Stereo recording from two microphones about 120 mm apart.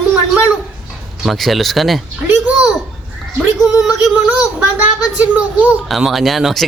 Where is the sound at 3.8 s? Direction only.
5° right (ahead or behind).